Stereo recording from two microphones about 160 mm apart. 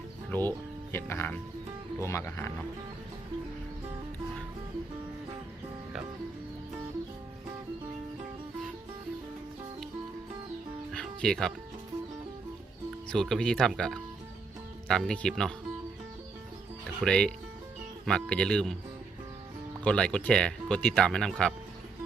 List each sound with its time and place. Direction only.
0.3 s speech: 10° left (ahead or behind)
10.9 s music: 5° left (ahead or behind)
13.1 s speech: 5° left (ahead or behind)
17.0 s a man's voice: 5° left (ahead or behind)
19.8 s speech: 5° left (ahead or behind)